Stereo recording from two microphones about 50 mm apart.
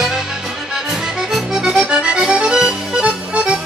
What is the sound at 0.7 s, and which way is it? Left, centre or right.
Accordion, centre.